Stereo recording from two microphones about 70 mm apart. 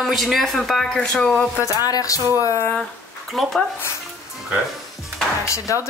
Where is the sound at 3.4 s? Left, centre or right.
Centre.